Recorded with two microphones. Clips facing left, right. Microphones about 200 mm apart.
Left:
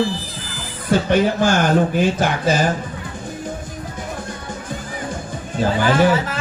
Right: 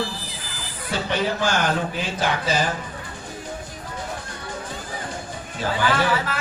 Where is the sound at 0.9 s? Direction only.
45° left (ahead or behind).